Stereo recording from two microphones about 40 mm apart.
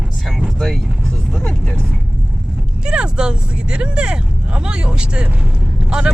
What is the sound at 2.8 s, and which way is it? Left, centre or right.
Speech, right.